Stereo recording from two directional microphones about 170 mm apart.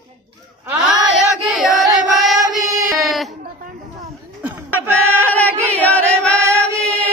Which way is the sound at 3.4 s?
55° right (ahead or behind).